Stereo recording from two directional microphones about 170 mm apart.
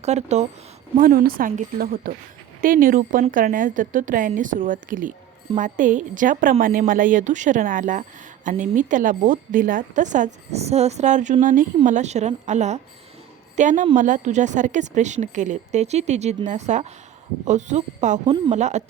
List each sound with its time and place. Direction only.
0.0 s a woman's voice: 40° right (ahead or behind)
0.9 s a woman's voice: 55° right (ahead or behind)